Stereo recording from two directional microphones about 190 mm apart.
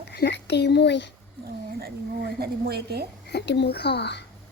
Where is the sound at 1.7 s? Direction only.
55° right (ahead or behind).